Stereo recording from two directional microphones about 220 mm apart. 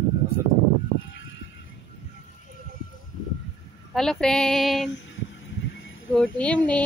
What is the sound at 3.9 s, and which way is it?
Speech, 5° left (ahead or behind).